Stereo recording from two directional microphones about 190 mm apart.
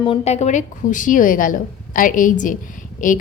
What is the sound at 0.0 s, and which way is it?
A woman's voice, 30° left (ahead or behind).